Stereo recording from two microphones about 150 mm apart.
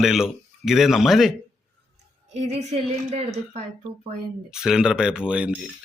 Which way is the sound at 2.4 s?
50° right (ahead or behind).